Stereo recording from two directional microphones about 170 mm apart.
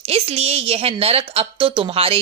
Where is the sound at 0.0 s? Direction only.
35° right (ahead or behind).